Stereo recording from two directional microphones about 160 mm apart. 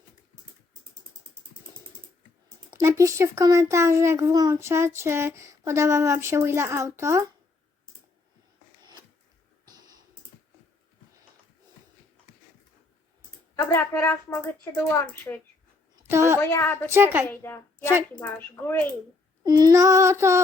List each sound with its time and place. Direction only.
2.7 s a child's voice: 15° right (ahead or behind)
13.7 s speech: 15° left (ahead or behind)
16.0 s a sound: 15° right (ahead or behind)
16.4 s speech: 15° left (ahead or behind)
16.9 s speech: 15° right (ahead or behind)
17.2 s speech: 15° left (ahead or behind)
19.5 s a child's voice: 25° right (ahead or behind)